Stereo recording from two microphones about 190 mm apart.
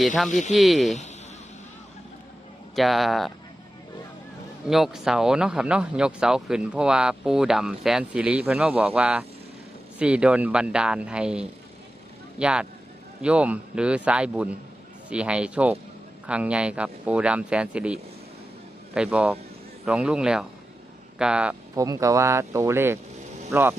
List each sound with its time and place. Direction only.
0.5 s speech: centre (ahead or behind)
2.7 s speech: centre (ahead or behind)
4.7 s speech: centre (ahead or behind)
21.8 s speech: 15° right (ahead or behind)